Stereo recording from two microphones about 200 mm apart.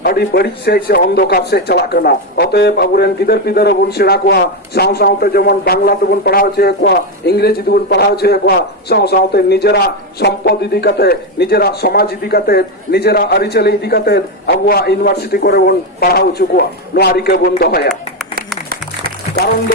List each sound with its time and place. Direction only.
0.0 s speech: 50° left (ahead or behind)
18.3 s applause: 50° right (ahead or behind)